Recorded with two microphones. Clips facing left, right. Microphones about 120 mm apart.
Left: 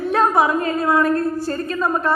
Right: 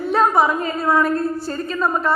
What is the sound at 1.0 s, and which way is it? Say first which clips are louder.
Speech: left 2 dB; 45° left (ahead or behind).